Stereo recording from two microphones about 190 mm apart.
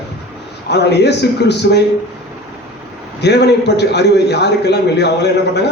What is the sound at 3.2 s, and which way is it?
A man's voice, 60° left (ahead or behind).